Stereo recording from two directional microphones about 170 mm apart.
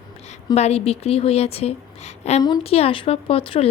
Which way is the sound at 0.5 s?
40° left (ahead or behind).